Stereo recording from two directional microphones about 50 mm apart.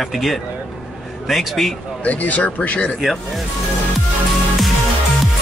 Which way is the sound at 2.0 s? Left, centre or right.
Left.